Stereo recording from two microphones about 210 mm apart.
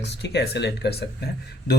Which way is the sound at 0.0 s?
50° left (ahead or behind).